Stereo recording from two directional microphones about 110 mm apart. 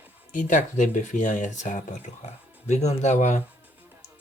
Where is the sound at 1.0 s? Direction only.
90° left.